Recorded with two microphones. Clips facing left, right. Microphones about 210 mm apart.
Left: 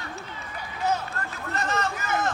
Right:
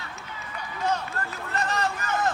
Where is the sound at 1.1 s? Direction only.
35° right (ahead or behind).